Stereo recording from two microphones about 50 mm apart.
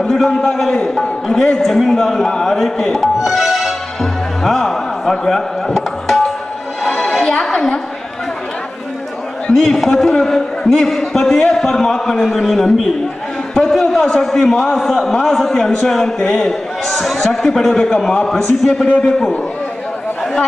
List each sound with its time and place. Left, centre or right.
0.0 s a man's voice: centre
0.3 s a man's voice: centre
6.8 s music: centre
9.5 s a man's voice: centre